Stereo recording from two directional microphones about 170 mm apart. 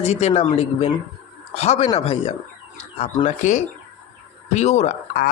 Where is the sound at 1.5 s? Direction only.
40° left (ahead or behind).